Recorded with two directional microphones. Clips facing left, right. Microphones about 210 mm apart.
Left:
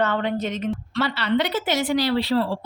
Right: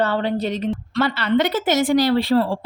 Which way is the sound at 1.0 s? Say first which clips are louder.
Right 4 dB; 50° right (ahead or behind).